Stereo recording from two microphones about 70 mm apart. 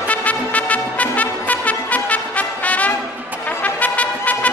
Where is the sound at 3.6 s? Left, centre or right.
Left.